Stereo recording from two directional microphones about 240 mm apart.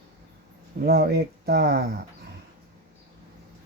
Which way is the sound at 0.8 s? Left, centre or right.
Right.